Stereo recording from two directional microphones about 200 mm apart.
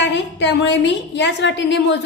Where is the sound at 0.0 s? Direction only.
60° left (ahead or behind).